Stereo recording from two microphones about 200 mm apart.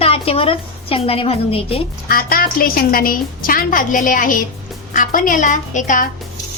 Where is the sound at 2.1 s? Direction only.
45° left (ahead or behind).